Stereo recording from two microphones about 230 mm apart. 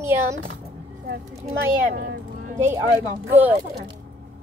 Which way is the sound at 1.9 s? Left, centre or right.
Right.